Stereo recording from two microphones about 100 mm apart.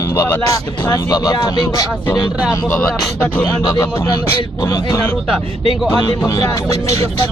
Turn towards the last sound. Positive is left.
turn(degrees=40)  # may be behind; listen again after turning